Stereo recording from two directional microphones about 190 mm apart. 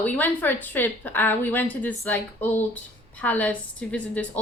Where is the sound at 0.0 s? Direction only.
10° left (ahead or behind).